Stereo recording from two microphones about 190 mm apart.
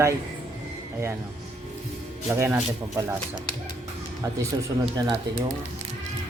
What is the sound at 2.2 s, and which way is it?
Speech, 15° right (ahead or behind).